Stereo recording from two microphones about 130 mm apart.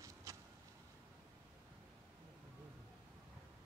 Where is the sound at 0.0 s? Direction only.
25° right (ahead or behind).